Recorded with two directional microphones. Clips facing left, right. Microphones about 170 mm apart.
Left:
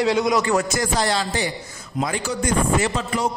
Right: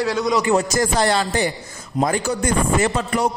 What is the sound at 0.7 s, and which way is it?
Speech, 55° right (ahead or behind).